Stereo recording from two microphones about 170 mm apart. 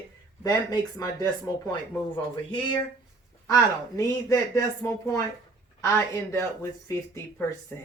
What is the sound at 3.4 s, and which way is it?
A woman's voice, 15° left (ahead or behind).